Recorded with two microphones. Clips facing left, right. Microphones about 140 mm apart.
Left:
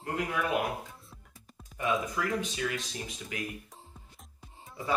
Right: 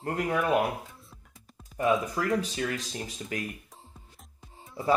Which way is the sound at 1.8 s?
40° right (ahead or behind).